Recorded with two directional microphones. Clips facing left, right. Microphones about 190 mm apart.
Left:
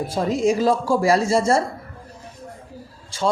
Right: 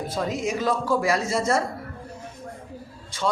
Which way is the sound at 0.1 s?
30° left (ahead or behind).